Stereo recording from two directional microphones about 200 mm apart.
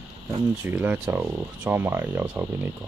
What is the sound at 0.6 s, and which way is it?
Speech, 10° right (ahead or behind).